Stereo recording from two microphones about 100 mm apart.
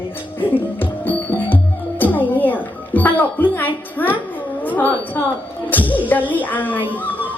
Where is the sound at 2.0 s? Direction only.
15° left (ahead or behind).